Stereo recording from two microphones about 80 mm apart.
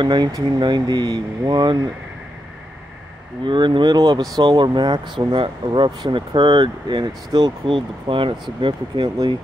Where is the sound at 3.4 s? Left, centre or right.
Right.